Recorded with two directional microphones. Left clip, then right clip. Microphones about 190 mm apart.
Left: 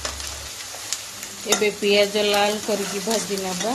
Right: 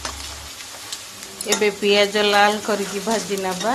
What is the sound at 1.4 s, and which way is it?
Stir, 5° left (ahead or behind).